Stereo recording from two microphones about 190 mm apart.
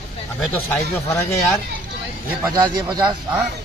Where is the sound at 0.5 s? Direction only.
10° left (ahead or behind).